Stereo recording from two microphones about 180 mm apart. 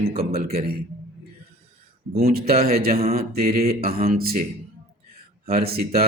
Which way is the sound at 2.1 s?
60° right (ahead or behind).